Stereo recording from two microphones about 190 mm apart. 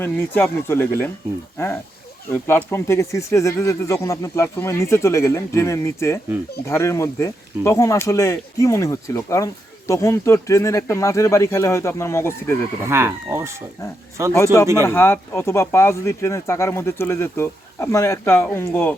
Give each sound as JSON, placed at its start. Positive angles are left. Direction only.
{"t": 0.0, "sound": "speech", "side_deg": 5}
{"t": 12.8, "sound": "speech", "side_deg": -15}
{"t": 14.3, "sound": "speech", "side_deg": 15}